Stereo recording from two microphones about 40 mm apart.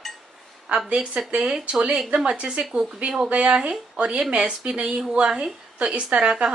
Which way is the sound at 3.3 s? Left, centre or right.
Right.